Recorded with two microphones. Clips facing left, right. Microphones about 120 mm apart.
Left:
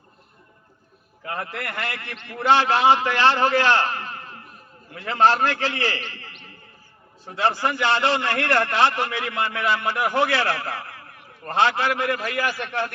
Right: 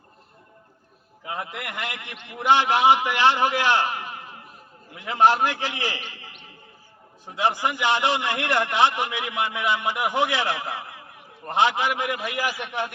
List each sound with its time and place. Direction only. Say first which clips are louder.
1.2 s a man's voice: left 2 dB; 15° right (ahead or behind)